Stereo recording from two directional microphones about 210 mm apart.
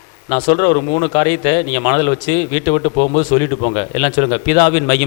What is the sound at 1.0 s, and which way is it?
A man's voice, 15° left (ahead or behind).